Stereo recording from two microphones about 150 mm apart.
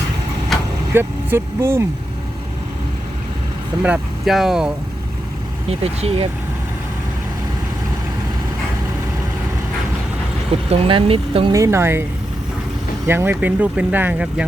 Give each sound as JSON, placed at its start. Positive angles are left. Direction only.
{"t": 0.9, "sound": "speech", "side_deg": -15}
{"t": 3.8, "sound": "speech", "side_deg": -5}
{"t": 5.6, "sound": "speech", "side_deg": -45}
{"t": 10.7, "sound": "speech", "side_deg": -35}
{"t": 11.5, "sound": "speech", "side_deg": -20}
{"t": 13.1, "sound": "speech", "side_deg": -15}